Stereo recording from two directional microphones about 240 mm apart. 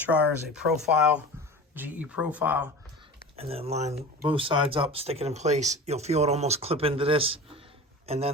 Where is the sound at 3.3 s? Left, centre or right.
Right.